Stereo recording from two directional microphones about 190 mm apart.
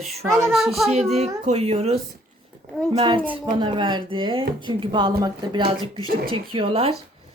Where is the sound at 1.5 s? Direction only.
35° right (ahead or behind).